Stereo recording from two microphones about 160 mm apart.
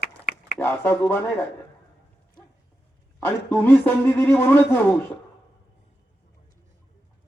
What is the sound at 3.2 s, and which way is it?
Speech, 10° left (ahead or behind).